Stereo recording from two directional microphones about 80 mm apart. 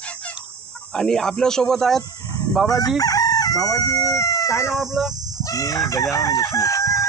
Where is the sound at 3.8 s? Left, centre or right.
Left.